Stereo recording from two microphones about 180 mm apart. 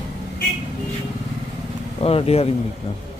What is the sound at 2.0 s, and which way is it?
Speech, 35° left (ahead or behind).